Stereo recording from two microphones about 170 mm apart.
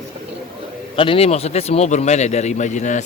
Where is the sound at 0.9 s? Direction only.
30° left (ahead or behind).